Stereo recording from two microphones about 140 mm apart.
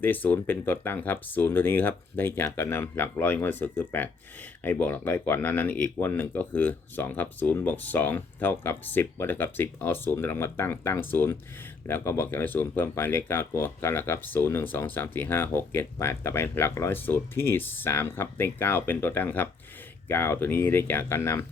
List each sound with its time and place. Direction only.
0.0 s speech: 15° left (ahead or behind)